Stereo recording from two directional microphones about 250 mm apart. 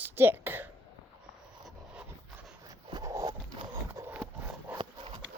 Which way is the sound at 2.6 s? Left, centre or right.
Centre.